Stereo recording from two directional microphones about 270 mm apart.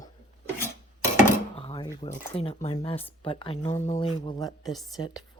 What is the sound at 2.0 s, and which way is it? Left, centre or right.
Speech, left.